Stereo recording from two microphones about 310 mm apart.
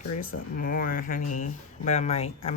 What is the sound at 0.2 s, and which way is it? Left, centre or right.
Speech, left.